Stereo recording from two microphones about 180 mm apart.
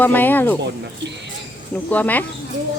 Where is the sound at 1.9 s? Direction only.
10° left (ahead or behind).